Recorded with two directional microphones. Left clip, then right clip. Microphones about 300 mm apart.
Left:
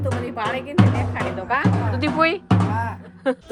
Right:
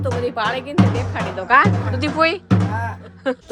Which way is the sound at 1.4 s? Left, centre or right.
Right.